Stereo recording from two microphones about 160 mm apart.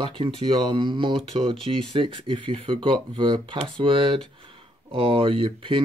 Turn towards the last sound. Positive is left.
turn(degrees=-35)  # may be behind; listen again after turning